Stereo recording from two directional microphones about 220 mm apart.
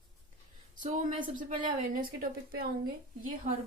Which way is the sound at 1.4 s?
35° right (ahead or behind).